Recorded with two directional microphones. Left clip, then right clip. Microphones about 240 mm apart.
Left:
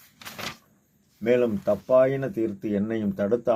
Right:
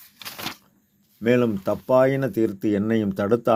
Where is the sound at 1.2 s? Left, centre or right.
Right.